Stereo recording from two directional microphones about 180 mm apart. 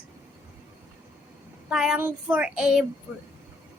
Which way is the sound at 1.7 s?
5° right (ahead or behind).